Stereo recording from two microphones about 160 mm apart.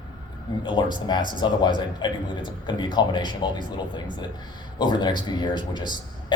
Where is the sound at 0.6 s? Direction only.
30° left (ahead or behind).